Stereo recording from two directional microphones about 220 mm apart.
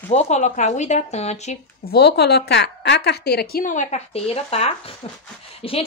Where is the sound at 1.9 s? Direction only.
50° left (ahead or behind).